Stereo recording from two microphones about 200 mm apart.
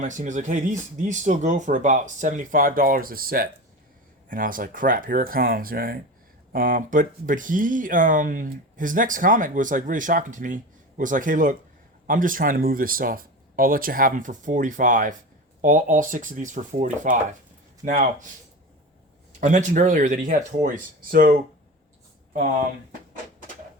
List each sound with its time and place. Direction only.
0.0 s speech: 40° right (ahead or behind)
19.4 s speech: 40° right (ahead or behind)